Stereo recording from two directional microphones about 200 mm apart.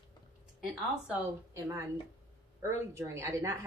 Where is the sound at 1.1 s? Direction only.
15° right (ahead or behind).